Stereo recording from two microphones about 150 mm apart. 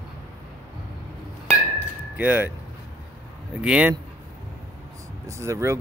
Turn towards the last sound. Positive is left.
turn(degrees=-20)  # may be behind; listen again after turning